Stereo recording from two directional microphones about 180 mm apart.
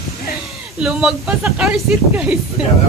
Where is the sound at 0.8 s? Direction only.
5° right (ahead or behind).